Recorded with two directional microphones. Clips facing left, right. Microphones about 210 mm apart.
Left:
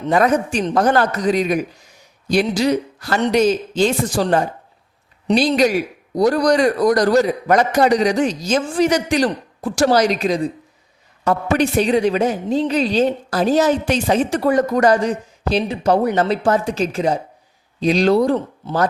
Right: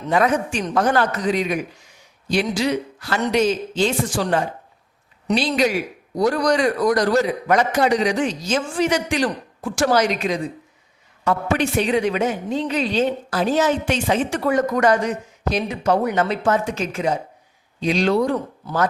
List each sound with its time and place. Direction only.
0.1 s a woman's voice: 40° left (ahead or behind)